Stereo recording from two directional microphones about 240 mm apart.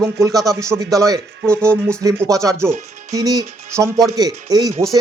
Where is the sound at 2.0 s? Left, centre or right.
Centre.